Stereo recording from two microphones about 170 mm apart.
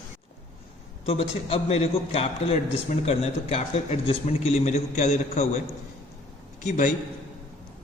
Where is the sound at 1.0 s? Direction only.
35° left (ahead or behind).